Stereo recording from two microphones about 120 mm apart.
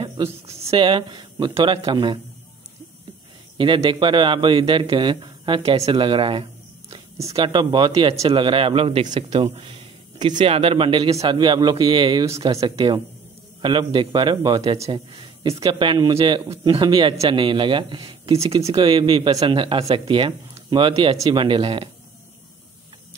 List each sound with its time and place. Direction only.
0.0 s a man's voice: 50° right (ahead or behind)
3.5 s a man's voice: 45° right (ahead or behind)
7.2 s speech: 25° right (ahead or behind)
7.4 s a man's voice: 35° right (ahead or behind)
8.2 s a man's voice: 50° right (ahead or behind)
18.5 s a man's voice: 55° right (ahead or behind)